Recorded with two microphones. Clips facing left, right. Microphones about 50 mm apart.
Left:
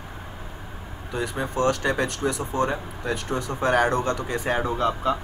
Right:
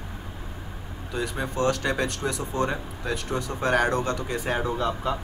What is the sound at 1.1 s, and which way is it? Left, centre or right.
Speech, centre.